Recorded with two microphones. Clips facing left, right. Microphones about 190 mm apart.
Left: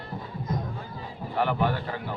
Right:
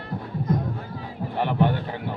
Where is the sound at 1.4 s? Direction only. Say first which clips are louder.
Right 3 dB; 20° right (ahead or behind).